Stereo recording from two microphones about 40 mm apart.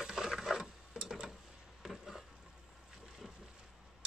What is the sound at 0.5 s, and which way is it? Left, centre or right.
Stir, centre.